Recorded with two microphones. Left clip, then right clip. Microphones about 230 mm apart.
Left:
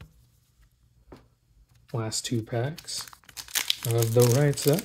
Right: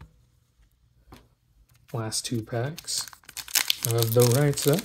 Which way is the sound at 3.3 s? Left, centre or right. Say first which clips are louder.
Right 2 dB; centre.